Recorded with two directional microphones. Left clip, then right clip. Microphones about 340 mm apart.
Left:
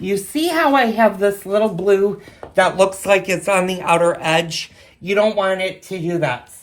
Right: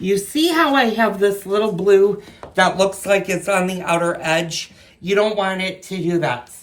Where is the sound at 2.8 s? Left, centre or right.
Left.